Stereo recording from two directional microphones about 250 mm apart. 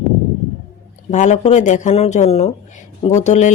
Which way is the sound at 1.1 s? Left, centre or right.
Left.